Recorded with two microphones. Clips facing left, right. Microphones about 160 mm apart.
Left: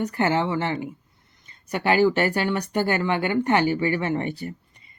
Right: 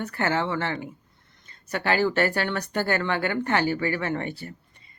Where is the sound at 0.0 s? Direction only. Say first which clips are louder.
Left 3 dB; 15° left (ahead or behind).